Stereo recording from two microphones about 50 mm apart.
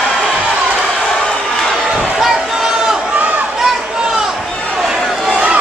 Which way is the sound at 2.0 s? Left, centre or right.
Centre.